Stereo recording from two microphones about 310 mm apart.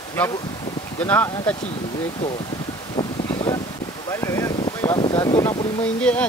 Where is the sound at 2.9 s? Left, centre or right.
Centre.